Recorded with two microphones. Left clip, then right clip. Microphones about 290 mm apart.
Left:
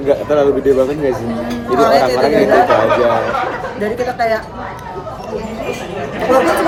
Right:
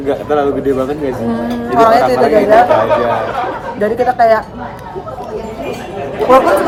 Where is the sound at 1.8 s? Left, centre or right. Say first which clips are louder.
Right 3 dB; centre.